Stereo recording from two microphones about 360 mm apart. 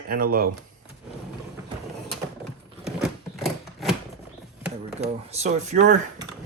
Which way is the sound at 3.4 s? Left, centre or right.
Centre.